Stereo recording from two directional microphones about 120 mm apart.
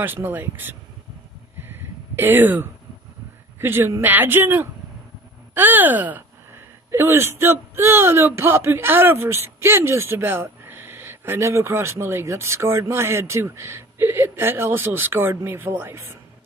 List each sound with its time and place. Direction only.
0.0 s speech: 15° right (ahead or behind)
1.6 s a sound: 15° right (ahead or behind)
3.5 s speech: 20° right (ahead or behind)